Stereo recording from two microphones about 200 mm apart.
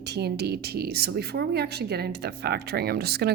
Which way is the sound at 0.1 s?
55° right (ahead or behind).